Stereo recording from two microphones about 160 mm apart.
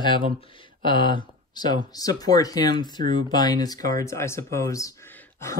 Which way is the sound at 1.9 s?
25° left (ahead or behind).